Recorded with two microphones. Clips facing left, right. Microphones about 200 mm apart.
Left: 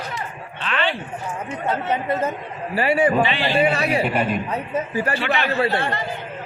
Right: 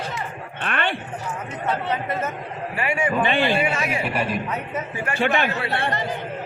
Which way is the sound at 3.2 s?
50° right (ahead or behind).